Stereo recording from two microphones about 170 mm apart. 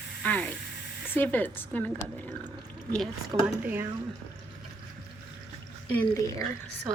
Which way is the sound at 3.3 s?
20° right (ahead or behind).